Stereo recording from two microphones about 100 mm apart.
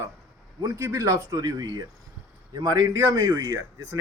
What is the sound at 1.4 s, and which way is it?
Speech, 45° right (ahead or behind).